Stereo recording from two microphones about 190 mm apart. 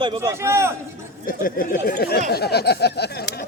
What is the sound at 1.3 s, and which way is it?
Speech, 50° left (ahead or behind).